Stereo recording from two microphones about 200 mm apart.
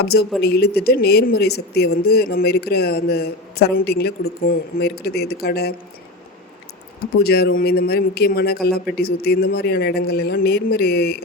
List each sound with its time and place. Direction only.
0.0 s speech: 50° left (ahead or behind)
7.1 s speech: 50° left (ahead or behind)